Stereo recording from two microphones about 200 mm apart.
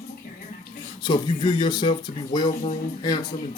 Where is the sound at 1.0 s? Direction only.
25° left (ahead or behind).